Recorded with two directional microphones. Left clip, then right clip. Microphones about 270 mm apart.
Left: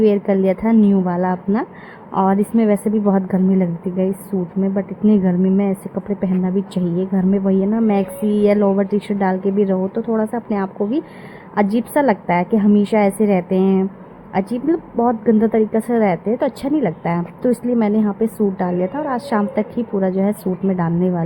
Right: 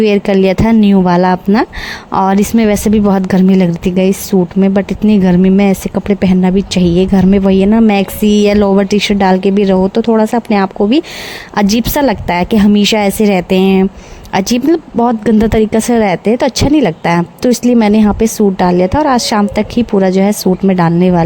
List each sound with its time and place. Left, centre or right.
0.0 s speech: right